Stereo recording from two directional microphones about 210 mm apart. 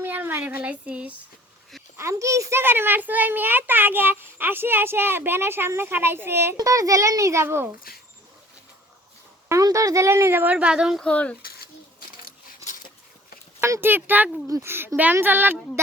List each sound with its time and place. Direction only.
0.0 s a child's voice: 10° right (ahead or behind)
9.5 s a child's voice: 15° right (ahead or behind); by 11.3 s 5° left (ahead or behind)
12.6 s a sound: 40° left (ahead or behind)
13.6 s a child's voice: 15° right (ahead or behind)